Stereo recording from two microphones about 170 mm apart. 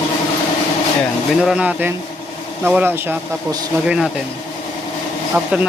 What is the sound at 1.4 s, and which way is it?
Speech, 5° right (ahead or behind).